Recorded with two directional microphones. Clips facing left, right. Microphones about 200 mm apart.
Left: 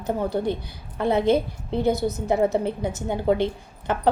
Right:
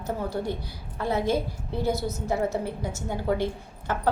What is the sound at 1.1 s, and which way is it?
Speech, 60° left (ahead or behind).